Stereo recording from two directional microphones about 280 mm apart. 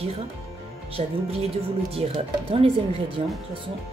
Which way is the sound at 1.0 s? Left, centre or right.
Right.